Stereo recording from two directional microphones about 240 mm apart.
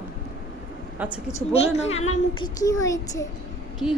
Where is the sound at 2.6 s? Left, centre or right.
Centre.